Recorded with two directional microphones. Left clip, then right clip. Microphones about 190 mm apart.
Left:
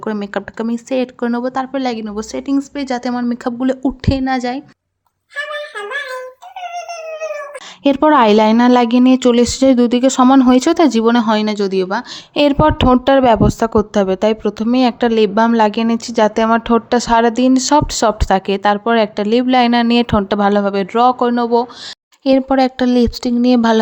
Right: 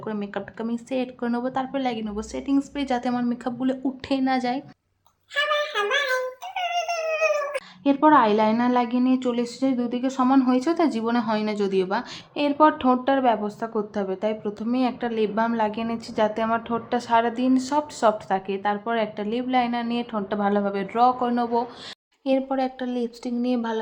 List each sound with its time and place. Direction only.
0.0 s speech: 45° left (ahead or behind)
7.9 s speech: 60° left (ahead or behind); by 12.0 s 35° left (ahead or behind)
12.3 s speech: 60° left (ahead or behind)